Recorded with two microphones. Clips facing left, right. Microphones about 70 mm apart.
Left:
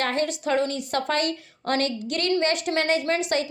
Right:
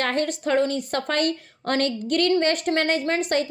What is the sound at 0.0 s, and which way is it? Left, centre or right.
A woman's voice, right.